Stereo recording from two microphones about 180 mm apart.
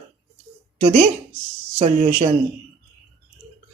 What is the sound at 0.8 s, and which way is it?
Speech, 35° right (ahead or behind).